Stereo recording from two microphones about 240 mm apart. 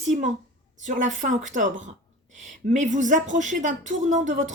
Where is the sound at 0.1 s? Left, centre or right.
Right.